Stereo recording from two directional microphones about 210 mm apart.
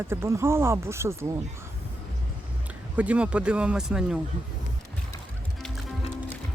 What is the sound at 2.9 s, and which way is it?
Speech, 5° right (ahead or behind).